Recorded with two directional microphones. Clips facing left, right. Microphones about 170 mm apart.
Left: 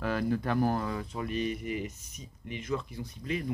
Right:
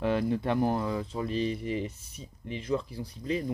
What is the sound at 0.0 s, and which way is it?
Speech, 25° right (ahead or behind).